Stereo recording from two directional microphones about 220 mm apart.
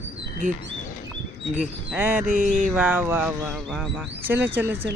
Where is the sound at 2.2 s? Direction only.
35° right (ahead or behind).